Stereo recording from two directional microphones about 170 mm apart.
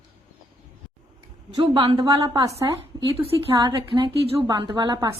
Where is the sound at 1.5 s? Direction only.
30° right (ahead or behind).